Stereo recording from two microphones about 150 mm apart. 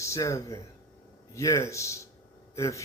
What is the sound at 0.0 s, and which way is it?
Speech, 20° left (ahead or behind).